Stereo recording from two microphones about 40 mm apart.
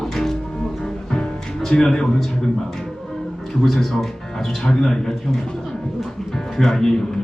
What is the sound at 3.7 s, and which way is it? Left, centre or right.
Speech, centre.